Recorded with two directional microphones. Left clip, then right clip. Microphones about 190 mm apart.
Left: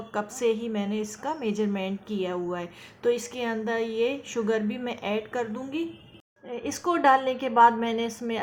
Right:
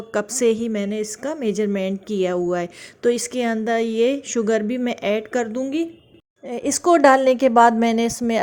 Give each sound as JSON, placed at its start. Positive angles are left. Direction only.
{"t": 0.3, "sound": "a woman's voice", "side_deg": -45}